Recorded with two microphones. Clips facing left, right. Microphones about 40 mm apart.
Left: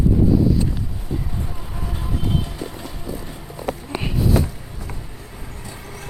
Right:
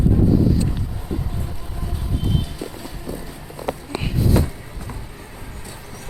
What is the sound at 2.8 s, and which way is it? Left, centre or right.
Boat, left.